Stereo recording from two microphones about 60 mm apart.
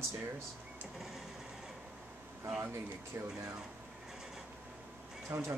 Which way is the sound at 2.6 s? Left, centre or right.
Right.